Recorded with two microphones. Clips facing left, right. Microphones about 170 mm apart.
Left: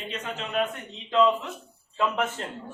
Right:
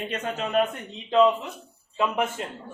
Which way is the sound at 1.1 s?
20° right (ahead or behind).